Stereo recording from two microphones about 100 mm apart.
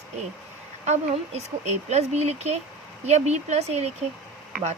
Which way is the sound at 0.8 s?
90° right.